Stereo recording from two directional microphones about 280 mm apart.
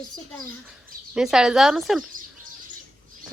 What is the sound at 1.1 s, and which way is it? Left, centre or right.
Speech, centre.